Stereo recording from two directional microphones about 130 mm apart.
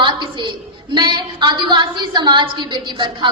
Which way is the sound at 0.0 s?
35° right (ahead or behind).